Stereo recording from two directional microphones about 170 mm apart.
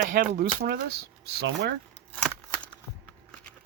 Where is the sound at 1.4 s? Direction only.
80° right.